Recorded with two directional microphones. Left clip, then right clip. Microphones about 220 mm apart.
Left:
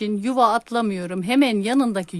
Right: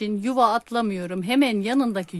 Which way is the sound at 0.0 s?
10° left (ahead or behind).